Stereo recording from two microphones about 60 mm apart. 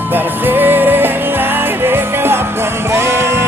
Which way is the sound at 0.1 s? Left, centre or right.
Right.